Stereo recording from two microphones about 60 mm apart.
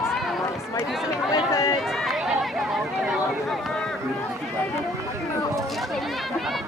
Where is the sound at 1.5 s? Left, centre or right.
Left.